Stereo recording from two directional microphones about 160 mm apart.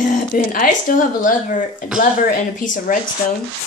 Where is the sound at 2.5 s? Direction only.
55° left (ahead or behind).